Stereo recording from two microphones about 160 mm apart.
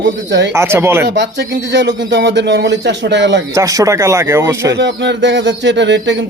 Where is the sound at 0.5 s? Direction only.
15° right (ahead or behind).